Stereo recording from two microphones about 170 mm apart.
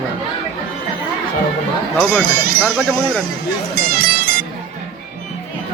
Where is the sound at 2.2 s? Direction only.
60° right (ahead or behind).